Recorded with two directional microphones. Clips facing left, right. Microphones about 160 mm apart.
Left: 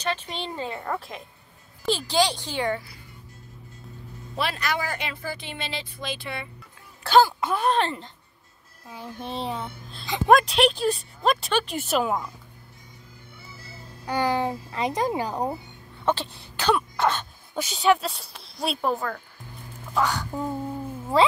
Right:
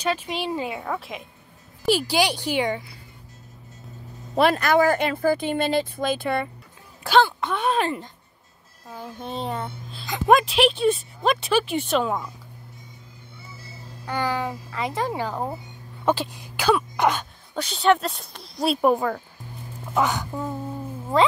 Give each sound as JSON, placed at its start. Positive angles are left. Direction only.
{"t": 0.0, "sound": "a woman's voice", "side_deg": -10}
{"t": 4.4, "sound": "speech", "side_deg": -50}
{"t": 7.3, "sound": "a woman's voice", "side_deg": 5}
{"t": 9.2, "sound": "a woman's voice", "side_deg": 0}
{"t": 14.0, "sound": "speech", "side_deg": 20}
{"t": 16.1, "sound": "speech", "side_deg": -10}
{"t": 16.9, "sound": "wail", "side_deg": -15}
{"t": 17.6, "sound": "a woman's voice", "side_deg": 5}
{"t": 18.8, "sound": "a woman's voice", "side_deg": -20}